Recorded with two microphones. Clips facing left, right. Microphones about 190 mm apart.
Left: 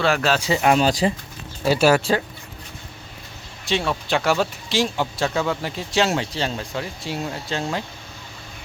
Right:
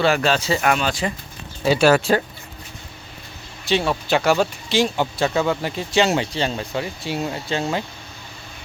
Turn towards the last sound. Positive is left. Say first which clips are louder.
# right 3 dB
turn(degrees=0)  # may be behind; listen again after turning